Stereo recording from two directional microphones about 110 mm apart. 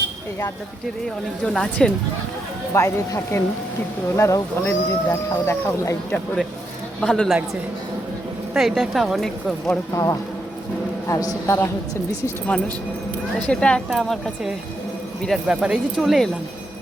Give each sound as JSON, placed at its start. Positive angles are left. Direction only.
{"t": 1.5, "sound": "speech", "side_deg": 5}
{"t": 2.7, "sound": "speech", "side_deg": 25}
{"t": 4.6, "sound": "speech", "side_deg": 20}
{"t": 7.0, "sound": "a woman's voice", "side_deg": 5}
{"t": 8.5, "sound": "a woman's voice", "side_deg": 0}
{"t": 9.9, "sound": "speech", "side_deg": 30}
{"t": 12.5, "sound": "a woman's voice", "side_deg": 10}